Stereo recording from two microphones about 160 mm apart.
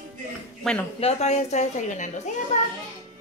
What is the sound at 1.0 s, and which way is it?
A woman's voice, 45° left (ahead or behind).